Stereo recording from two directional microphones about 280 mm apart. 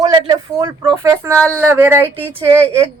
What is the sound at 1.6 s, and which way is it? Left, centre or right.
Speech, centre.